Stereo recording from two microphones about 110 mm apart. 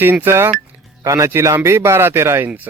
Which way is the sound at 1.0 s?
30° right (ahead or behind).